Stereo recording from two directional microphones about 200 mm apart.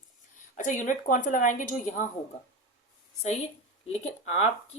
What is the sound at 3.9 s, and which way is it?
Speech, 35° left (ahead or behind).